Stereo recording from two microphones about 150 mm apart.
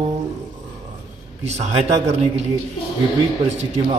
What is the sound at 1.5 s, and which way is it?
Speech, 45° right (ahead or behind).